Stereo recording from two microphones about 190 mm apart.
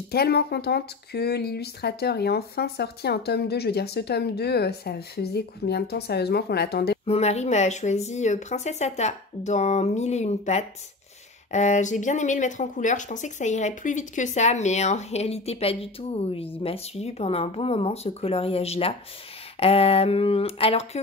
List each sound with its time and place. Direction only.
0.1 s speech: 55° left (ahead or behind)
7.1 s speech: 35° left (ahead or behind)